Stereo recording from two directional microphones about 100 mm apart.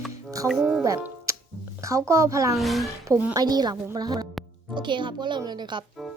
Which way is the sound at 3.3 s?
40° right (ahead or behind).